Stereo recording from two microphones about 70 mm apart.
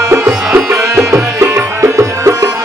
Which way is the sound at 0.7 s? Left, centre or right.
Right.